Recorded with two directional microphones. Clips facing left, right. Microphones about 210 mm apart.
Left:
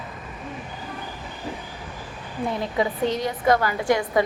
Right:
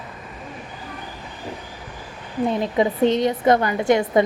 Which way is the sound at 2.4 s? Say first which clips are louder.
Right 4 dB; 20° right (ahead or behind).